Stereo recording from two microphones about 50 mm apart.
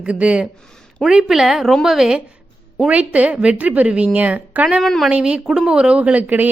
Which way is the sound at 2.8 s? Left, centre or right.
Right.